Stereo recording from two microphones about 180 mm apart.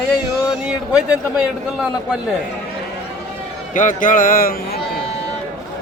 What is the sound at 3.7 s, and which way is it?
Speech, 45° left (ahead or behind).